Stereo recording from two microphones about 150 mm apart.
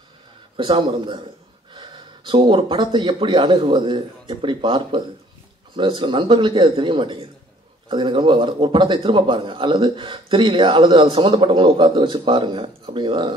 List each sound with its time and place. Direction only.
0.6 s a man's voice: 35° right (ahead or behind)